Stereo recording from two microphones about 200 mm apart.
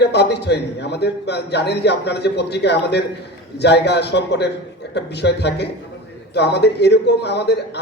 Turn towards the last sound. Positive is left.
turn(degrees=55)  # may be behind; listen again after turning